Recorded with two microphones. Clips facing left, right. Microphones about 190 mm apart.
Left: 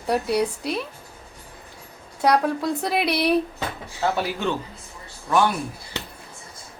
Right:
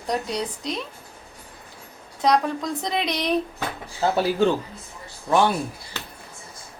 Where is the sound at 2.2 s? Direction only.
10° left (ahead or behind).